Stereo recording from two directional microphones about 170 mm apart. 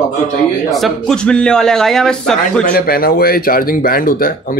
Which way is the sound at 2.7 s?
60° left (ahead or behind).